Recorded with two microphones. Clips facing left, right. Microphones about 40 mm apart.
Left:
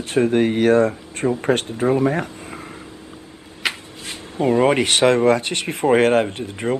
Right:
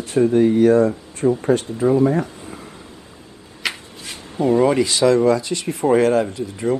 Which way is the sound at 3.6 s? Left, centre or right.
Left.